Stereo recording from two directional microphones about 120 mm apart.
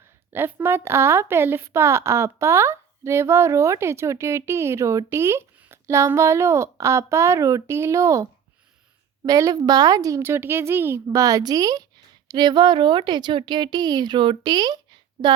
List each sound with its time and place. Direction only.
0.3 s a woman's voice: 20° right (ahead or behind); by 14.8 s 35° right (ahead or behind)